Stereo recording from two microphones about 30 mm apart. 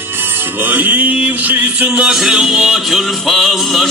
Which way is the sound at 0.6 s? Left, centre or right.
Right.